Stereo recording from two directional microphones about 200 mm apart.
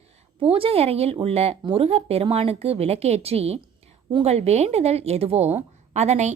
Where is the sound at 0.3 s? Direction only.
25° right (ahead or behind).